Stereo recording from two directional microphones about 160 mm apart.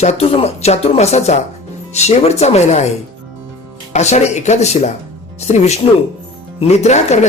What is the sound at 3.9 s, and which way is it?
Speech, 45° left (ahead or behind).